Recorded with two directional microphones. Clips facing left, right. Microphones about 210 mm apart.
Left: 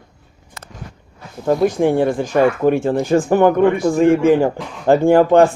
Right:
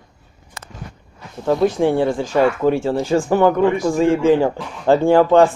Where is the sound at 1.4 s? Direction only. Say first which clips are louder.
Left 1 dB; 15° left (ahead or behind).